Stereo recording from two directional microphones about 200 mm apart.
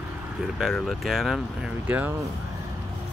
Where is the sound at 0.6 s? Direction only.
Centre (ahead or behind).